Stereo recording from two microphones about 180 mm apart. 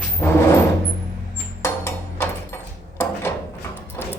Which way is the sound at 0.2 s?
15° left (ahead or behind).